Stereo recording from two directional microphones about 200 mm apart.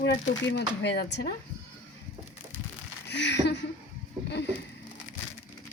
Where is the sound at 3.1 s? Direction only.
60° left (ahead or behind).